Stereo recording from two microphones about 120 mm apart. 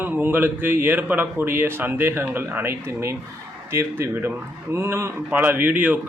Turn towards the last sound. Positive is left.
turn(degrees=-15)  # may be behind; listen again after turning